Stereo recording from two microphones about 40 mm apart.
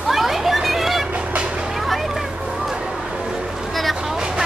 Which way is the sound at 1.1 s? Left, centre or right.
Right.